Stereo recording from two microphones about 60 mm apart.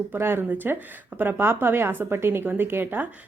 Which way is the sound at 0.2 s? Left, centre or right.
Right.